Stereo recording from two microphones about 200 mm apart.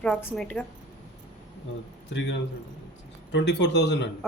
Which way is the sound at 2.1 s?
65° left (ahead or behind).